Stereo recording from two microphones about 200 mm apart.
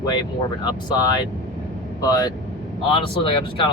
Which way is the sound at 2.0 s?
20° left (ahead or behind).